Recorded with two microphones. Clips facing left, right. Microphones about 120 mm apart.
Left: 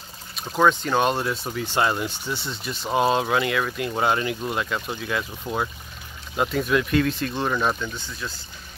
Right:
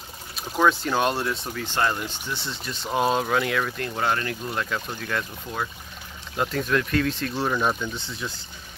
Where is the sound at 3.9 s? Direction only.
15° left (ahead or behind).